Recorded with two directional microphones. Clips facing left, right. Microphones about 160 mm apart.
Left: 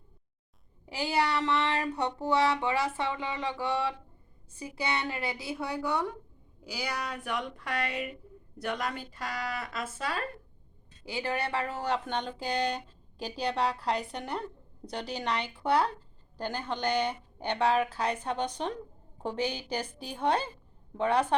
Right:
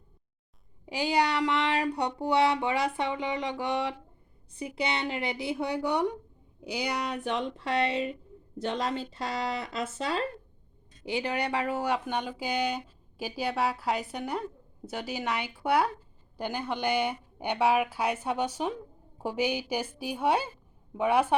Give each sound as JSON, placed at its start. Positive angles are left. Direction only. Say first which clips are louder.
{"t": 0.9, "sound": "speech", "louder": "right 2 dB", "side_deg": -15}